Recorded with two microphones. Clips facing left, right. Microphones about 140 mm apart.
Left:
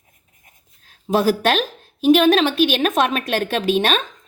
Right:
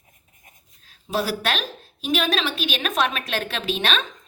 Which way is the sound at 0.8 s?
50° left (ahead or behind).